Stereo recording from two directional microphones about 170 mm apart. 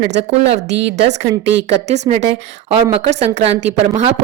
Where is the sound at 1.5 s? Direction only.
40° right (ahead or behind).